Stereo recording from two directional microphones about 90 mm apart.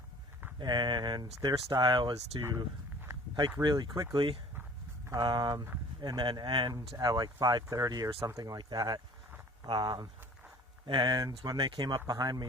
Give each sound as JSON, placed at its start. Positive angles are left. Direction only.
{"t": 0.6, "sound": "speech", "side_deg": -55}
{"t": 1.8, "sound": "speech", "side_deg": -60}
{"t": 3.6, "sound": "speech", "side_deg": -50}
{"t": 4.1, "sound": "speech", "side_deg": -75}
{"t": 5.1, "sound": "speech", "side_deg": -50}
{"t": 6.9, "sound": "speech", "side_deg": -45}
{"t": 9.6, "sound": "speech", "side_deg": -60}
{"t": 11.9, "sound": "speech", "side_deg": -45}